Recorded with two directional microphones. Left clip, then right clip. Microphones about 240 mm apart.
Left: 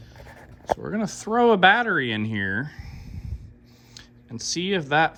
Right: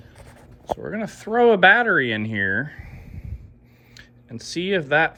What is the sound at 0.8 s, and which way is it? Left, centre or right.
Speech, centre.